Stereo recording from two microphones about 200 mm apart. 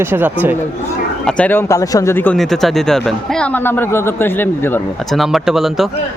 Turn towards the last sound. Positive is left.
turn(degrees=0)  # may be behind; listen again after turning